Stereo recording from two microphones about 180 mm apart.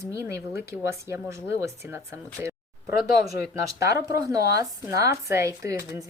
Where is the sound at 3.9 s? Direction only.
20° right (ahead or behind).